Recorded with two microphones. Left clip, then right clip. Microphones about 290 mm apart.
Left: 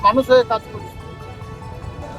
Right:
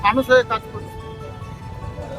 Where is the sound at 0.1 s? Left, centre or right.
Centre.